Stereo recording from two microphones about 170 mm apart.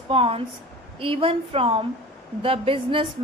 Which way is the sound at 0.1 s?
35° right (ahead or behind).